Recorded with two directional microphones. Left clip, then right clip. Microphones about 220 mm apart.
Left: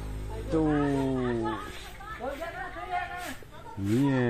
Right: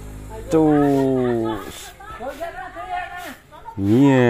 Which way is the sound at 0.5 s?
25° right (ahead or behind).